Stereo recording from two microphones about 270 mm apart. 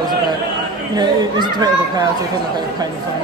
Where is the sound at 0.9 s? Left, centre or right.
Centre.